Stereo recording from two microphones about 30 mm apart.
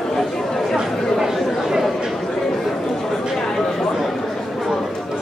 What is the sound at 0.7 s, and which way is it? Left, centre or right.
Chatter, centre.